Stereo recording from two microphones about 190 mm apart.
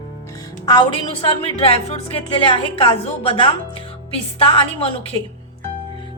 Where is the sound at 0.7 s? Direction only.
25° left (ahead or behind).